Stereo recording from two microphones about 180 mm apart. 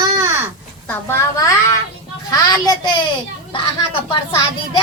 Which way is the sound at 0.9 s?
15° left (ahead or behind).